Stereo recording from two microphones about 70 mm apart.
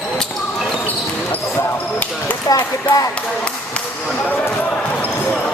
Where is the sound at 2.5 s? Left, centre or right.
Left.